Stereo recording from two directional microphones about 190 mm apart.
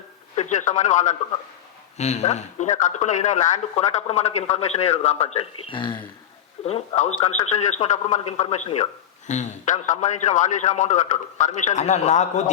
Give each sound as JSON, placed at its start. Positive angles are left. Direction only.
{"t": 0.3, "sound": "speech", "side_deg": 40}
{"t": 6.7, "sound": "speech", "side_deg": 35}